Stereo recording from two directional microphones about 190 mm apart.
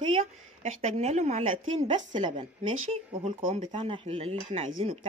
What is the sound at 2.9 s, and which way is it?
Speech, 30° right (ahead or behind).